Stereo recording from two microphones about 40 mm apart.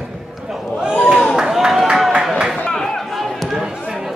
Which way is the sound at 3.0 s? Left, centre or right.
Centre.